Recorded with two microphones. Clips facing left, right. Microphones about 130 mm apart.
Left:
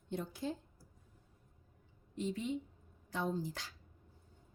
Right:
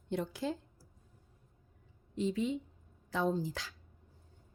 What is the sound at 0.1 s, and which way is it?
Speech, 90° right.